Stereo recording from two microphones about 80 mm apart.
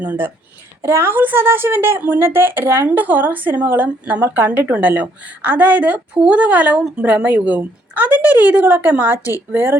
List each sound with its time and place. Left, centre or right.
0.0 s a woman's voice: right
0.8 s a woman's voice: right; by 7.0 s centre
7.0 s a woman's voice: centre